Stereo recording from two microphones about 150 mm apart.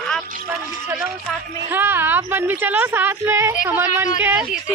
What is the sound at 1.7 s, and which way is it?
Speech, 15° right (ahead or behind).